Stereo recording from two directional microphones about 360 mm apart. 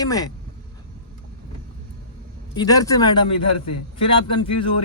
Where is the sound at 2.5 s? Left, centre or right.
Centre.